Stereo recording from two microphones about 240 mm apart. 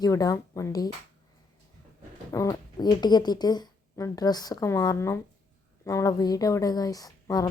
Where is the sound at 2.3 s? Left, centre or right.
Centre.